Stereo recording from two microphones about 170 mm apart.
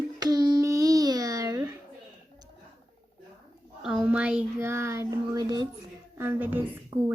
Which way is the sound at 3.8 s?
5° right (ahead or behind).